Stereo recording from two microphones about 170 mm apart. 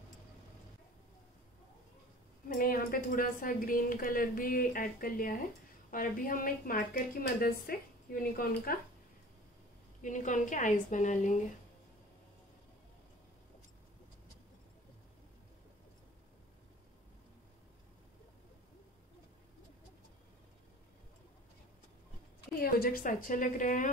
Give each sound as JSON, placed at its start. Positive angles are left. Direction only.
{"t": 2.4, "sound": "a woman's voice", "side_deg": 55}
{"t": 10.0, "sound": "a woman's voice", "side_deg": 45}
{"t": 22.6, "sound": "a woman's voice", "side_deg": 60}